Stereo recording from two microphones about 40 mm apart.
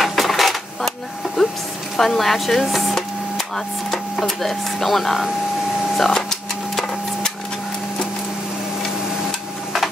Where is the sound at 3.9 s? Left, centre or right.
Centre.